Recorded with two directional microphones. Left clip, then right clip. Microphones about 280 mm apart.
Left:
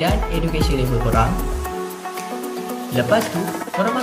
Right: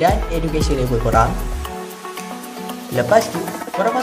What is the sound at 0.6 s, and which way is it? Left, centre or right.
Speech, right.